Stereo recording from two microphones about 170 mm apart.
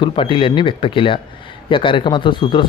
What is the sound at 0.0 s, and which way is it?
Speech, 30° left (ahead or behind).